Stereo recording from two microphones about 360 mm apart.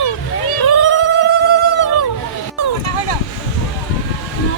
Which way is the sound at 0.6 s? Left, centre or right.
Left.